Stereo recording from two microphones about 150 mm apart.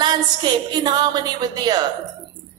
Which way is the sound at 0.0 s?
30° right (ahead or behind).